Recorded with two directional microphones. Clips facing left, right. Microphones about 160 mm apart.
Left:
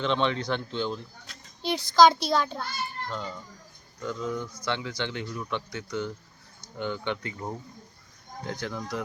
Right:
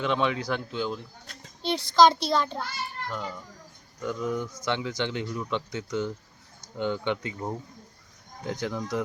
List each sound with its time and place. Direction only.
0.0 s a child's voice: 10° right (ahead or behind)
3.1 s speech: 5° right (ahead or behind)